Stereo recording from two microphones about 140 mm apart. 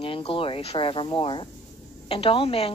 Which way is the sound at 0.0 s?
40° left (ahead or behind).